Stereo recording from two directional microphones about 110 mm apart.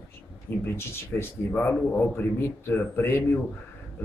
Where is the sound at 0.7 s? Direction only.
20° left (ahead or behind).